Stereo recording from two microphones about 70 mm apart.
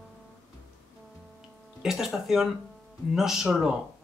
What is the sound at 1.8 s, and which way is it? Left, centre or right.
Speech, centre.